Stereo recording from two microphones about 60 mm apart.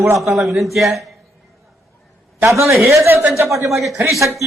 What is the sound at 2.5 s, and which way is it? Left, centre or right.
A man's voice, right.